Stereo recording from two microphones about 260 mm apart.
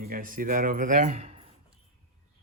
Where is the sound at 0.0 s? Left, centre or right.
Right.